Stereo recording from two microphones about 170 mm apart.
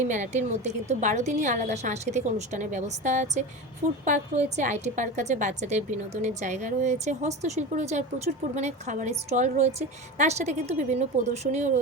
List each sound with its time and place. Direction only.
0.1 s a woman's voice: 45° right (ahead or behind)